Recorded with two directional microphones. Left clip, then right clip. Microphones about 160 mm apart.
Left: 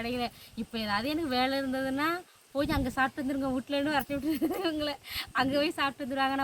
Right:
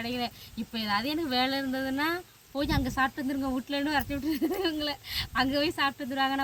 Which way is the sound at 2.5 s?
40° left (ahead or behind).